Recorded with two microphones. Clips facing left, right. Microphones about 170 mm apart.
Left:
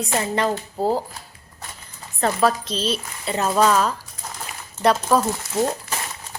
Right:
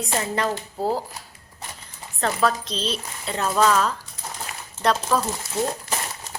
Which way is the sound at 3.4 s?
20° left (ahead or behind).